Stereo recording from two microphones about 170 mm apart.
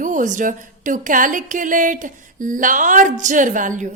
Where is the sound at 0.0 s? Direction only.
50° right (ahead or behind).